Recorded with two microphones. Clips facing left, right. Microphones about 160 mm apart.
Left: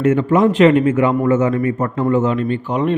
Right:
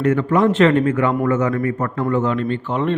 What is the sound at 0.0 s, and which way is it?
A man's voice, 20° left (ahead or behind).